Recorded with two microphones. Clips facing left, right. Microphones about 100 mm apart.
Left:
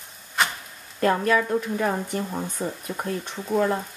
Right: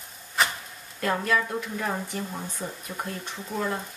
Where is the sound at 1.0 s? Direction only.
45° left (ahead or behind).